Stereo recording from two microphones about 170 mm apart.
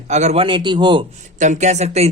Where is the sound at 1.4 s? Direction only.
45° right (ahead or behind).